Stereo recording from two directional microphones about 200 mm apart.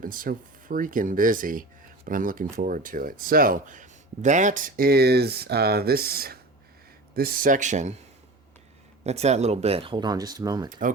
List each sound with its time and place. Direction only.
0.0 s speech: 45° right (ahead or behind)
9.0 s speech: 35° right (ahead or behind)